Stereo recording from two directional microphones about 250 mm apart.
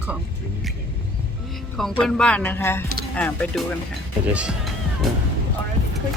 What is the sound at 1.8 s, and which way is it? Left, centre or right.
Speech, centre.